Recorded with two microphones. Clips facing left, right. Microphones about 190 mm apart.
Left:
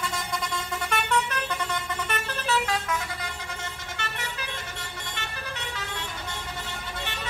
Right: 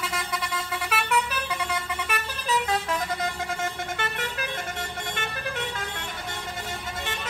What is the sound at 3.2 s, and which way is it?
Vehicle, 50° right (ahead or behind).